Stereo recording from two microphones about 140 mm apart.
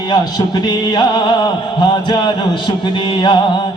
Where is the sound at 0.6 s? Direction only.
30° left (ahead or behind).